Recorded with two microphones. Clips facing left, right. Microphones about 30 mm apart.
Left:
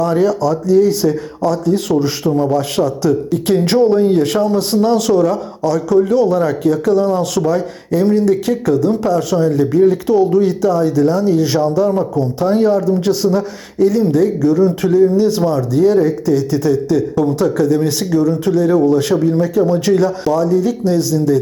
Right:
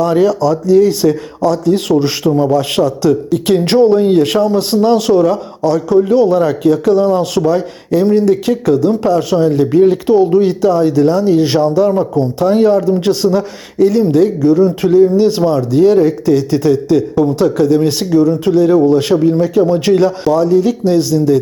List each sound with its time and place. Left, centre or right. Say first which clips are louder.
0.0 s speech: right 3 dB; right
3.6 s speech: right 2 dB; right
4.9 s speech: right 2 dB; right
7.4 s speech: right 3 dB; right
10.1 s speech: right 3 dB; right
10.6 s speech: right 3 dB; right
11.3 s speech: right 3 dB; right
11.7 s speech: right 3 dB; right
14.4 s speech: right 3 dB; right
14.9 s speech: right 3 dB; right
17.3 s speech: right 3 dB; right
18.1 s speech: right 4 dB; right
18.7 s speech: right 3 dB; right
20.3 s speech: right 3 dB; right